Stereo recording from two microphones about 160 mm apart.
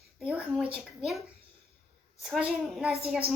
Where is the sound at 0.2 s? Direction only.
Centre (ahead or behind).